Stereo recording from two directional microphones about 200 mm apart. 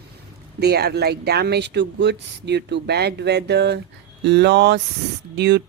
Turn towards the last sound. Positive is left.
turn(degrees=-60)  # may be behind; listen again after turning